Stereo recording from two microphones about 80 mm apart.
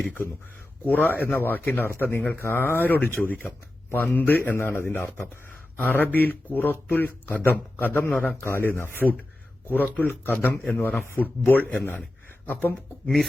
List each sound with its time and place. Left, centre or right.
0.9 s speech: left
2.4 s speech: left
8.4 s speech: left